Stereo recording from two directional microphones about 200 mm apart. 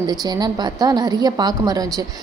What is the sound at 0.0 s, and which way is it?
A woman's voice, 20° right (ahead or behind).